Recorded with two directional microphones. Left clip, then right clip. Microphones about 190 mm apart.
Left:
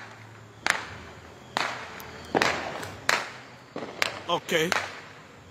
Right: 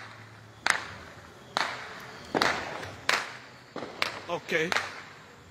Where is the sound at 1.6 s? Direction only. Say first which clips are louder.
Left 1 dB; 5° left (ahead or behind).